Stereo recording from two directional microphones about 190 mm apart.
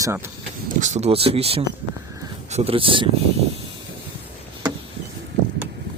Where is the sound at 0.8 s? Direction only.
35° right (ahead or behind).